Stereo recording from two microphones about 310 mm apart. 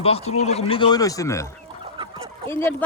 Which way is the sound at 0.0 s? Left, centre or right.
Centre.